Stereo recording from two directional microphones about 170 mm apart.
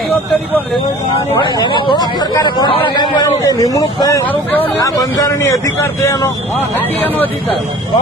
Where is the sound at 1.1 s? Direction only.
30° left (ahead or behind).